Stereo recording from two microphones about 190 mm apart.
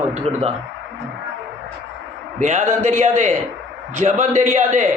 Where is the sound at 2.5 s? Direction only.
40° right (ahead or behind).